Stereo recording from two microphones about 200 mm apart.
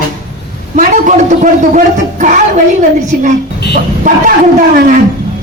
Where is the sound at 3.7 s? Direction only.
40° right (ahead or behind).